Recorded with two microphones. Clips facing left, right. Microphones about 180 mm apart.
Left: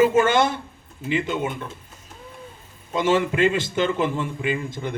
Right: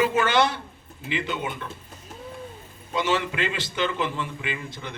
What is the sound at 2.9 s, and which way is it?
A man's voice, 45° left (ahead or behind).